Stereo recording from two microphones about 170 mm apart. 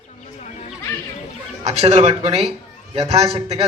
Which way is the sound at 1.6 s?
35° right (ahead or behind).